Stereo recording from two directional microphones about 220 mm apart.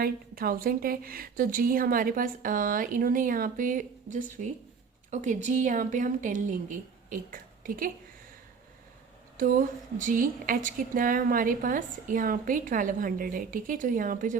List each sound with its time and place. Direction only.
0.0 s a woman's voice: 40° right (ahead or behind)
9.4 s a woman's voice: 35° right (ahead or behind)